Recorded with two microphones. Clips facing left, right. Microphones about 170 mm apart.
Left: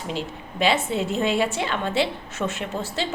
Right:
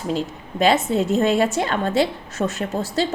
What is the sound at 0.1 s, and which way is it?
A woman's voice, 45° right (ahead or behind).